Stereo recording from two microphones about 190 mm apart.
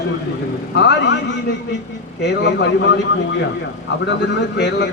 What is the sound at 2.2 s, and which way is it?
Speech, 65° left (ahead or behind).